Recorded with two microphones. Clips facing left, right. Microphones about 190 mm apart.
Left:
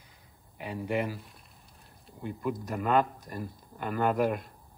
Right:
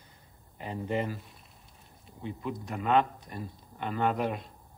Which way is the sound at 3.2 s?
45° left (ahead or behind).